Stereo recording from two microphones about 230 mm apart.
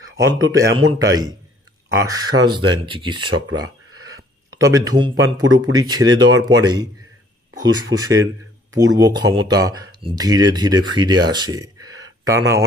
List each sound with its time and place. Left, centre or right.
0.5 s speech: centre
4.5 s speech: centre